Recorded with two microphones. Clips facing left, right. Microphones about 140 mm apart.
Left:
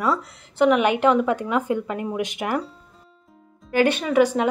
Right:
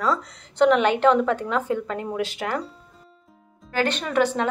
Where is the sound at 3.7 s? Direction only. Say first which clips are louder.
Left 5 dB; 10° left (ahead or behind).